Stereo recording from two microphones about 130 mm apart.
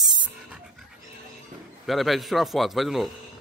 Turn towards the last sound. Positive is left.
turn(degrees=0)  # may be behind; listen again after turning